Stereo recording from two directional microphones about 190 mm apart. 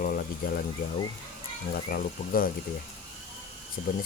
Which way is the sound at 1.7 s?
50° left (ahead or behind).